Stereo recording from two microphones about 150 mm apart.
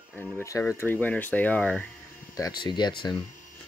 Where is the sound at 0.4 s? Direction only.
20° left (ahead or behind).